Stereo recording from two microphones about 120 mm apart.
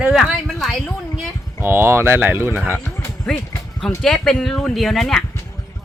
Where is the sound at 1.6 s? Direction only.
20° right (ahead or behind).